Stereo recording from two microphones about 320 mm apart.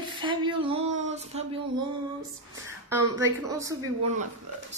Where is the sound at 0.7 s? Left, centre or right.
Right.